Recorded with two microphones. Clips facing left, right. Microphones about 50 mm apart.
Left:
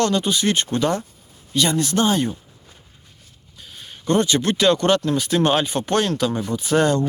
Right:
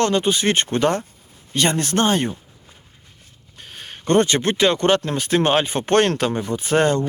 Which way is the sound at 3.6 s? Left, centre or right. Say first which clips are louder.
Right 3 dB; right.